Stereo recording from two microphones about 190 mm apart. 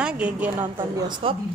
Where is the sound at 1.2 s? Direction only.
30° right (ahead or behind).